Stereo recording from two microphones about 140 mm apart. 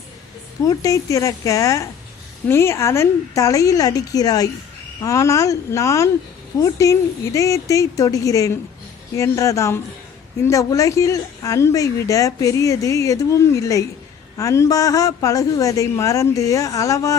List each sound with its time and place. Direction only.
0.7 s a woman's voice: 25° left (ahead or behind)